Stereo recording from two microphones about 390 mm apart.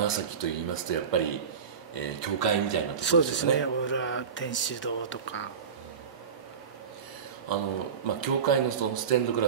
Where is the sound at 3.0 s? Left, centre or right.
Left.